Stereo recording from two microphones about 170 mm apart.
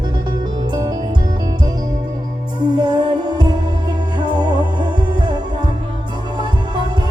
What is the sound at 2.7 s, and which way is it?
Music, 25° right (ahead or behind).